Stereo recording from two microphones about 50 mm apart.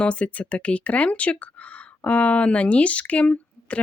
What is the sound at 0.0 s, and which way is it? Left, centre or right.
Speech, left.